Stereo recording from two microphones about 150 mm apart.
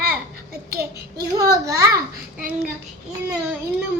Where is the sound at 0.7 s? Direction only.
90° right.